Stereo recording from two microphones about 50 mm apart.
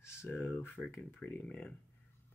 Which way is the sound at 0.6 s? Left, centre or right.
Left.